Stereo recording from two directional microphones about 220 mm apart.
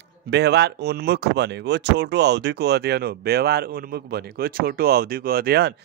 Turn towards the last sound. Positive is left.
turn(degrees=-45)  # may be behind; listen again after turning